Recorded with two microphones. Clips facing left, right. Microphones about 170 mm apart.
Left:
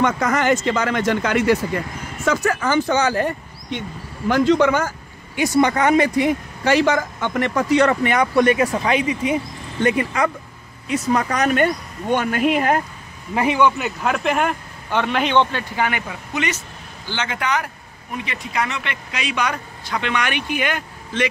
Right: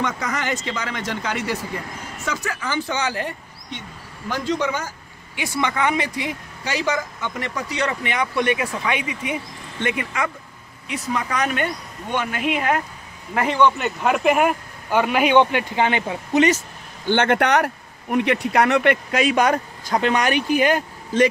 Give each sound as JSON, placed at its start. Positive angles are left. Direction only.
{"t": 0.0, "sound": "speech", "side_deg": 50}
{"t": 4.3, "sound": "speech", "side_deg": 60}
{"t": 13.3, "sound": "speech", "side_deg": 15}
{"t": 17.0, "sound": "speech", "side_deg": -55}